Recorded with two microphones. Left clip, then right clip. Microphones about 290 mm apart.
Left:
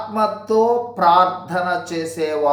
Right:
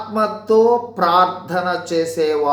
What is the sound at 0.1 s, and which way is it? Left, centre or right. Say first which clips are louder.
Speech: right 2 dB; centre.